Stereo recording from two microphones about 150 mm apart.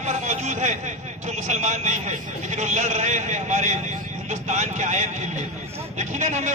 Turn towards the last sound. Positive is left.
turn(degrees=-50)  # may be behind; listen again after turning